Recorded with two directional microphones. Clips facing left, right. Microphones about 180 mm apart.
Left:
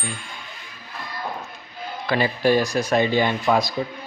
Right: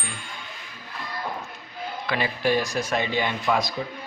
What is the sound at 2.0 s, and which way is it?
Speech, 35° left (ahead or behind).